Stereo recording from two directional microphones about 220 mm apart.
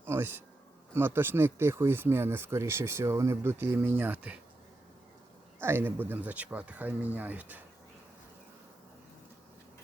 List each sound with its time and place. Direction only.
0.0 s a man's voice: 10° right (ahead or behind)
5.5 s speech: 10° right (ahead or behind)